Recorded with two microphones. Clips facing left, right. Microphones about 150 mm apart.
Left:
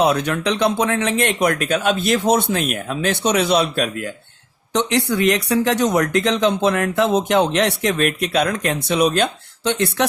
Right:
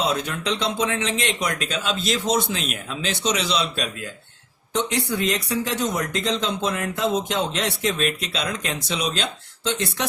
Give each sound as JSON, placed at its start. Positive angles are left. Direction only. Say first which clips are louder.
{"t": 0.0, "sound": "speech", "louder": "left 7 dB", "side_deg": 65}
{"t": 4.7, "sound": "speech", "louder": "left 5 dB", "side_deg": 70}